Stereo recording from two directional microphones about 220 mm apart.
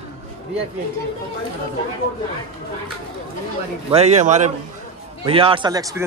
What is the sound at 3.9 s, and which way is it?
A man's voice, 30° right (ahead or behind).